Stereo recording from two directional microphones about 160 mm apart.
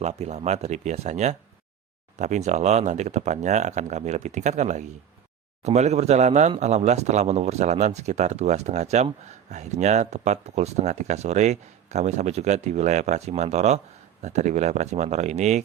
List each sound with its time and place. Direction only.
0.0 s speech: 45° right (ahead or behind)